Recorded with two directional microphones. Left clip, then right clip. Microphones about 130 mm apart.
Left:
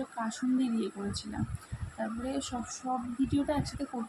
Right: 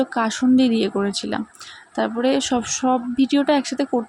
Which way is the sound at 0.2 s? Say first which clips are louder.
Right 13 dB; 75° right (ahead or behind).